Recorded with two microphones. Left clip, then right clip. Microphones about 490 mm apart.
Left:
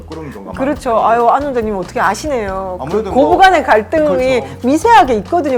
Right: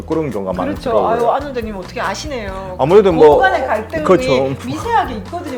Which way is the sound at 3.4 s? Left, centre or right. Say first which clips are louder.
Left 5 dB; left.